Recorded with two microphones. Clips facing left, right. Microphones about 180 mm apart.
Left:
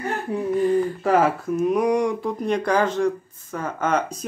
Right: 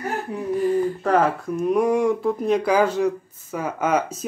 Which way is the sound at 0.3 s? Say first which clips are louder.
Left 4 dB; 25° left (ahead or behind).